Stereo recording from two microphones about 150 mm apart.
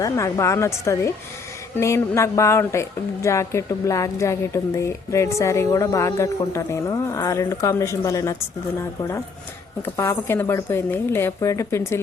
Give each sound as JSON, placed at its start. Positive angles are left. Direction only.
{"t": 0.0, "sound": "a woman's voice", "side_deg": 20}
{"t": 9.8, "sound": "speech", "side_deg": 15}